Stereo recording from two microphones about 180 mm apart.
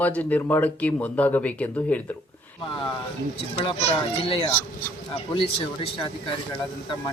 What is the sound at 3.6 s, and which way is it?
Speech, 30° left (ahead or behind).